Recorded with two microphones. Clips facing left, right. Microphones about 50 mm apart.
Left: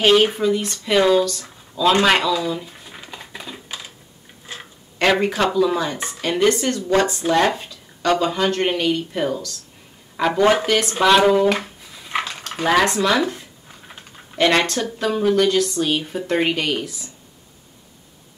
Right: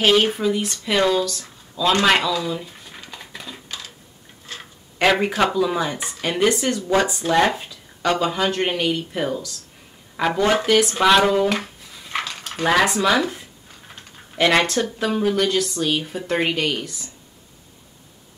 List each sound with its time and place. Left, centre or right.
0.0 s speech: centre
2.0 s a sound: centre
4.9 s speech: centre
11.6 s dog: centre
12.5 s speech: centre
13.7 s typing: centre
14.3 s speech: centre